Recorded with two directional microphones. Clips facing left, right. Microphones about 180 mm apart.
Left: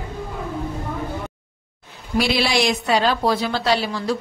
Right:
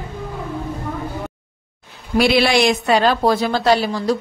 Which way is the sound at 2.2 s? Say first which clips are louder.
Right 5 dB; 55° right (ahead or behind).